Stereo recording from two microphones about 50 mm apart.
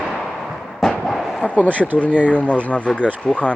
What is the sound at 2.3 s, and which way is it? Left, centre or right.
Speech, left.